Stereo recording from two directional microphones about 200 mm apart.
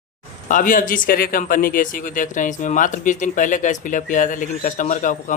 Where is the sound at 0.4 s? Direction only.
40° left (ahead or behind).